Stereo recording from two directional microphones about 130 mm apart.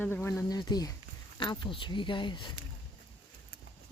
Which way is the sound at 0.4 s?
30° left (ahead or behind).